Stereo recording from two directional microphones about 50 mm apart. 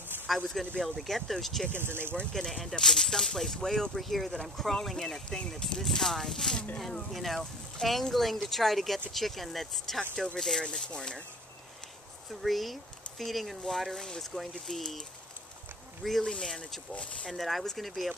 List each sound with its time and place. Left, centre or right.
0.3 s speech: centre
1.7 s speech: right
2.3 s speech: centre
4.3 s speech: centre
9.9 s speech: centre
12.4 s speech: centre
16.9 s speech: left
17.3 s speech: centre